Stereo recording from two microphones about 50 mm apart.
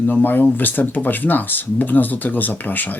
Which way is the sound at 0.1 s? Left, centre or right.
Left.